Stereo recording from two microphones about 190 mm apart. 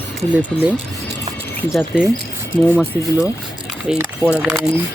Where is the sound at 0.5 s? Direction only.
5° left (ahead or behind).